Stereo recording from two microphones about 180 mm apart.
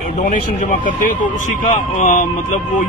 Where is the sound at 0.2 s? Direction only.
45° left (ahead or behind).